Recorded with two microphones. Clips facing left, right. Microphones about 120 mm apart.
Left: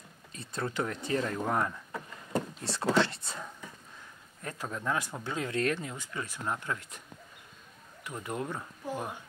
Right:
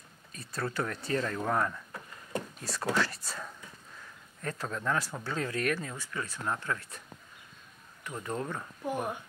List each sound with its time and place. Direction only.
0.3 s speech: 25° left (ahead or behind)
2.3 s speech: 25° left (ahead or behind)
8.2 s speech: 15° left (ahead or behind)
8.8 s speech: 15° right (ahead or behind)